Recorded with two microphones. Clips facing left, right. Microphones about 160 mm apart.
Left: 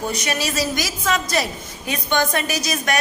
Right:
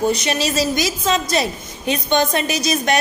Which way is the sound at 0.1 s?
25° right (ahead or behind).